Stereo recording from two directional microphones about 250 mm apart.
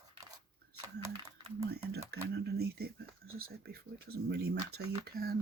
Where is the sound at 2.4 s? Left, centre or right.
Right.